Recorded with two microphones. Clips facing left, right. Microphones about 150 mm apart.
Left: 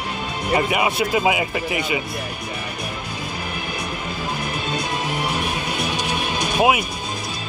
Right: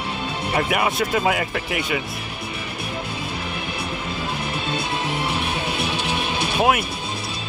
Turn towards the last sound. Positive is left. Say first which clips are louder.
# left 1 dB
turn(degrees=5)  # may be behind; listen again after turning